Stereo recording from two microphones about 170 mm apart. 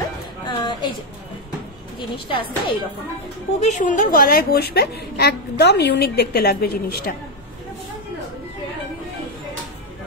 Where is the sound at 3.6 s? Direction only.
45° left (ahead or behind); by 7.1 s 65° left (ahead or behind).